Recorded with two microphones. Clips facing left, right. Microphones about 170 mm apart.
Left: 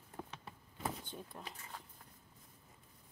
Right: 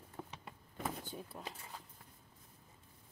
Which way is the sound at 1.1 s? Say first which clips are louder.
Right 2 dB; 5° right (ahead or behind).